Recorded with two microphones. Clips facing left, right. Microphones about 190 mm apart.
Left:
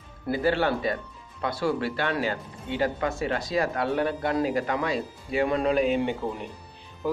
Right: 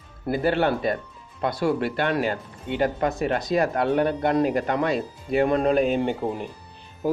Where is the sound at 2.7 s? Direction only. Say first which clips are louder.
Right 3 dB; 55° right (ahead or behind).